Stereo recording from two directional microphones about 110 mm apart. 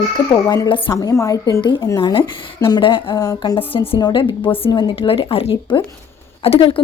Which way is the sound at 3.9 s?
45° left (ahead or behind).